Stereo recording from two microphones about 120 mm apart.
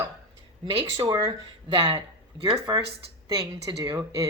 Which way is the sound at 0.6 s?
35° right (ahead or behind).